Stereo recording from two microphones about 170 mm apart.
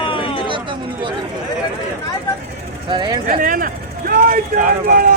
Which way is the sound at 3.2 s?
55° right (ahead or behind).